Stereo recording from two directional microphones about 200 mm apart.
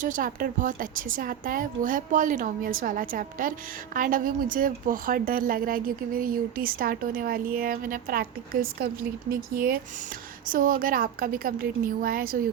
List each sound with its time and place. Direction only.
0.0 s a woman's voice: 40° right (ahead or behind)